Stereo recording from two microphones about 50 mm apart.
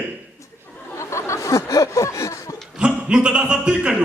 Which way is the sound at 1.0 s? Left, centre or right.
Left.